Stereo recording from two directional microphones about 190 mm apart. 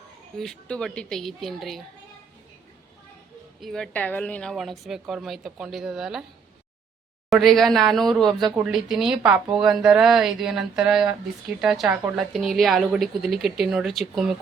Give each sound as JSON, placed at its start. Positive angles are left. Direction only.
{"t": 0.3, "sound": "a woman's voice", "side_deg": 5}
{"t": 3.6, "sound": "a woman's voice", "side_deg": 0}
{"t": 7.3, "sound": "a woman's voice", "side_deg": 0}
{"t": 8.3, "sound": "speech", "side_deg": -25}
{"t": 8.5, "sound": "a woman's voice", "side_deg": -5}